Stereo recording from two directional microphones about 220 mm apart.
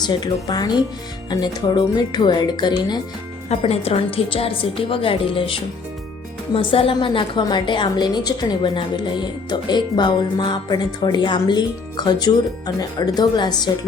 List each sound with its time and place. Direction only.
0.0 s speech: 20° left (ahead or behind)